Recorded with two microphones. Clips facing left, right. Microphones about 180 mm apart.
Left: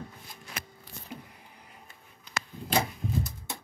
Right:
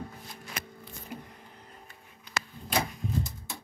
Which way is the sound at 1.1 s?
10° right (ahead or behind).